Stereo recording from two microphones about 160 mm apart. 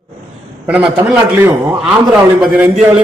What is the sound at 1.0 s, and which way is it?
A man's voice, 10° right (ahead or behind).